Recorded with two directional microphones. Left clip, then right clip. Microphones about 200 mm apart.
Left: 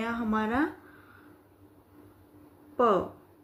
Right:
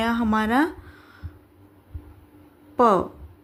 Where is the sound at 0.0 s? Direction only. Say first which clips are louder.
Right 7 dB; 55° right (ahead or behind).